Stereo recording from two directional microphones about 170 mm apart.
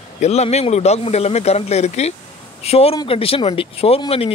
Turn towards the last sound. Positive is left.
turn(degrees=35)  # may be behind; listen again after turning